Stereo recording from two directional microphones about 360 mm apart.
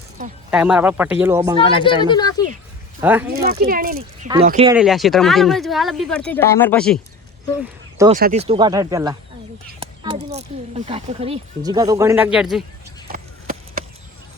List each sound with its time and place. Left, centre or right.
0.5 s speech: centre
1.5 s speech: centre
3.0 s speech: centre
3.3 s speech: right
4.7 s speech: centre
7.9 s speech: centre
13.1 s a sound: right